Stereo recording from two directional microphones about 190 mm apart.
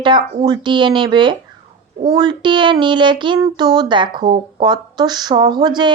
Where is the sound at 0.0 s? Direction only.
25° right (ahead or behind).